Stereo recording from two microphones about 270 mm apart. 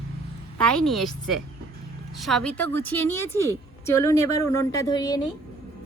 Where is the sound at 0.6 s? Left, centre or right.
Centre.